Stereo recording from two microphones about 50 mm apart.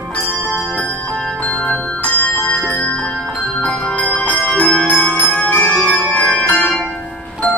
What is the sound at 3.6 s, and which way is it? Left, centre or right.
Music, left.